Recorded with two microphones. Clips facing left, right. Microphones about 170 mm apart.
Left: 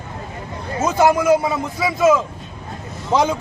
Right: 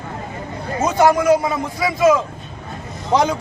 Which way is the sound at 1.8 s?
Centre (ahead or behind).